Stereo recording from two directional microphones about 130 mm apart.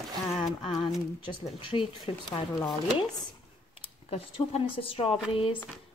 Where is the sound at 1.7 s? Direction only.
40° left (ahead or behind).